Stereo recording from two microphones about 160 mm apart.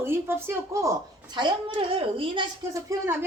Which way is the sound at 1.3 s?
30° right (ahead or behind).